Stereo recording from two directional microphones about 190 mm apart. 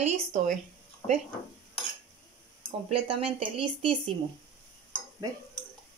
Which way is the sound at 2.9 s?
30° right (ahead or behind).